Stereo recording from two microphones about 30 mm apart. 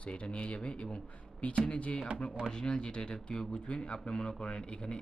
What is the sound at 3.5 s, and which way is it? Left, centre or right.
Speech, left.